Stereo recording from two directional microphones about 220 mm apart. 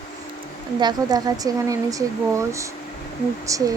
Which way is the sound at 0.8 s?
20° right (ahead or behind).